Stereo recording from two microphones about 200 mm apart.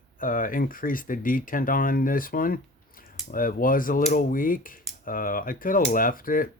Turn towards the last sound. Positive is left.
turn(degrees=45)  # may be behind; listen again after turning